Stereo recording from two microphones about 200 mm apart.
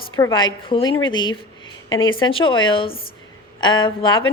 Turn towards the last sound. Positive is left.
turn(degrees=25)  # may be behind; listen again after turning